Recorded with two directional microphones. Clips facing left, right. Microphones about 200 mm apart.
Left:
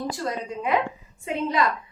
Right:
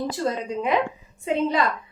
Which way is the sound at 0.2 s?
25° right (ahead or behind).